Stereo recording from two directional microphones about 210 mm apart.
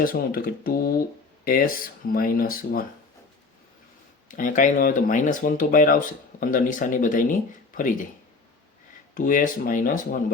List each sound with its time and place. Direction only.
0.0 s speech: 45° left (ahead or behind)
4.3 s speech: 40° left (ahead or behind)
9.1 s speech: 40° left (ahead or behind)